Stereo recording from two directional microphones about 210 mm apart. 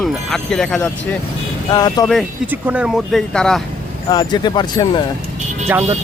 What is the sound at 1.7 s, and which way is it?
Speech, 20° left (ahead or behind).